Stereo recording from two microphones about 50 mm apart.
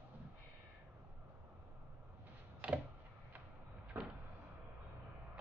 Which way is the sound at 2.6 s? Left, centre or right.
Right.